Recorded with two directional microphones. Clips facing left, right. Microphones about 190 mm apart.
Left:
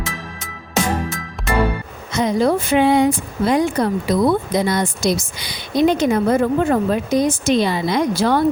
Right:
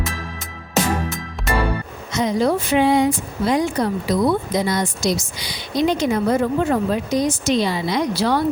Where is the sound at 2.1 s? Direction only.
55° left (ahead or behind).